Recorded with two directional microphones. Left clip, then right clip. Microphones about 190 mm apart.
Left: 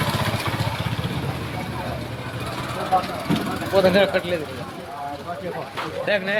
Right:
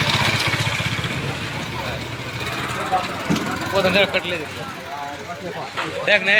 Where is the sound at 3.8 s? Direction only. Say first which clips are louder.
Left 1 dB; 70° left (ahead or behind).